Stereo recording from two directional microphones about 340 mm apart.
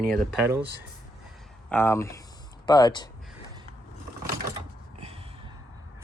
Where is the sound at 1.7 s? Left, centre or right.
Centre.